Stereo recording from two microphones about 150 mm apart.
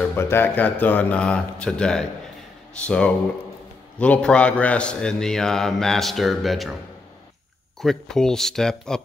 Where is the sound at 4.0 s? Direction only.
5° left (ahead or behind).